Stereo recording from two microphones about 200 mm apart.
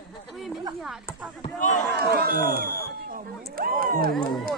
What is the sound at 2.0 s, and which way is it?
Speech, 50° right (ahead or behind).